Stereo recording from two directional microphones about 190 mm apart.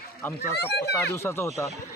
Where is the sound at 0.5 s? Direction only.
60° left (ahead or behind).